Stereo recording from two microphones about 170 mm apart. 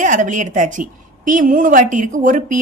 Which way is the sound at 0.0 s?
50° right (ahead or behind).